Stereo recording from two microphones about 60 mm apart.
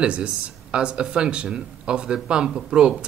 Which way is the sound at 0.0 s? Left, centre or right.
Centre.